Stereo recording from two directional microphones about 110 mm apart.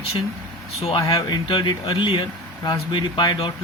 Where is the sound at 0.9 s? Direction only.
40° left (ahead or behind).